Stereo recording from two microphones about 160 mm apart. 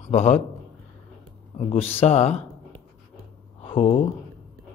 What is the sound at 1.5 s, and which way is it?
Speech, 40° left (ahead or behind).